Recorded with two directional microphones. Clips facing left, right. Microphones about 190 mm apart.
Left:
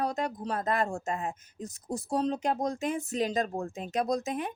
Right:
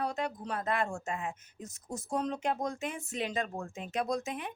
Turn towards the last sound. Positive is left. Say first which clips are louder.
# left 4 dB
turn(degrees=40)  # may be behind; listen again after turning